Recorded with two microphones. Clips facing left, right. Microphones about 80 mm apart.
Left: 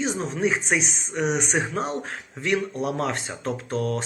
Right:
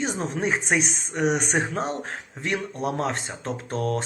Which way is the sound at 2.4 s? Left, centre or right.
Right.